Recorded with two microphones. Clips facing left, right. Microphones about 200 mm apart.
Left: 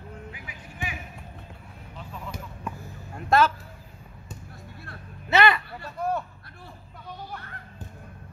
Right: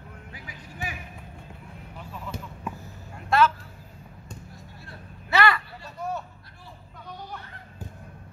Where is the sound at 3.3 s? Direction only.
40° left (ahead or behind).